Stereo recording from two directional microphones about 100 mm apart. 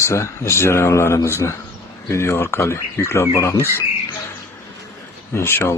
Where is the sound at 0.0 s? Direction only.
30° left (ahead or behind).